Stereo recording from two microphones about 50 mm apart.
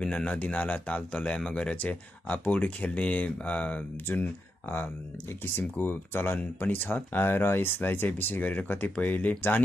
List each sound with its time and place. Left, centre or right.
0.0 s a man's voice: centre
0.4 s speech: left
4.1 s speech: left